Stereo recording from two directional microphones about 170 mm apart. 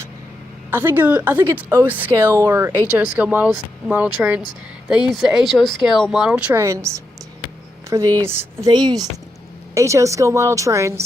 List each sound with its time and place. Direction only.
0.7 s a woman's voice: 10° right (ahead or behind)
6.6 s a woman's voice: 15° right (ahead or behind)